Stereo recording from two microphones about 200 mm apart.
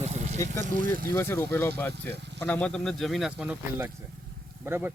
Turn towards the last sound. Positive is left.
turn(degrees=-10)  # may be behind; listen again after turning